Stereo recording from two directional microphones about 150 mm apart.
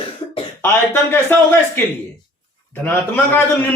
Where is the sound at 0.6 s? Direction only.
15° left (ahead or behind).